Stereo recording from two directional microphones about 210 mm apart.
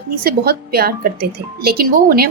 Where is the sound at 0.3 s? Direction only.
45° right (ahead or behind).